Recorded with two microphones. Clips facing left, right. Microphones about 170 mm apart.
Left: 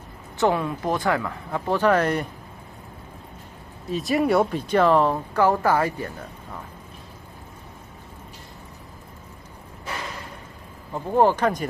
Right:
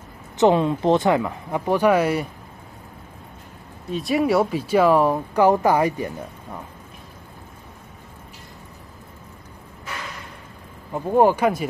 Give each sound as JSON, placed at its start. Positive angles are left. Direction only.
{"t": 0.4, "sound": "speech", "side_deg": -20}
{"t": 3.9, "sound": "speech", "side_deg": 0}
{"t": 10.9, "sound": "speech", "side_deg": -15}